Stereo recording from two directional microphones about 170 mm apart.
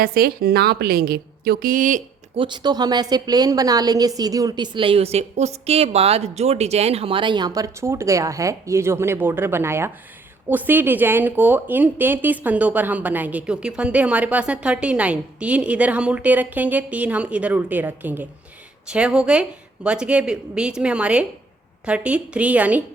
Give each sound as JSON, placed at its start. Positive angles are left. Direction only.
{"t": 0.0, "sound": "a woman's voice", "side_deg": -60}
{"t": 2.3, "sound": "a woman's voice", "side_deg": -30}